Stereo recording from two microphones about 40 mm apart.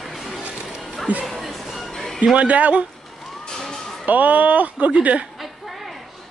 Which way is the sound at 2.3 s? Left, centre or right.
Right.